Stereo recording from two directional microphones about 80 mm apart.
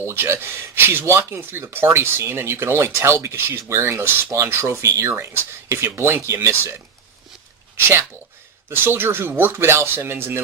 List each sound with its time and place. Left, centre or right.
0.0 s speech: right
8.7 s speech: right